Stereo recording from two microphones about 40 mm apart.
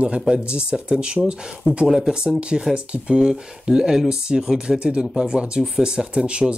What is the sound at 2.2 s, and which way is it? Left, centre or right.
Speech, right.